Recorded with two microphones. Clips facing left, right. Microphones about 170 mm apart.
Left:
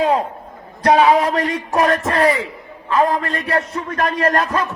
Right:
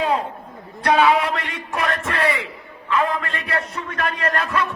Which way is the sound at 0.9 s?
35° left (ahead or behind).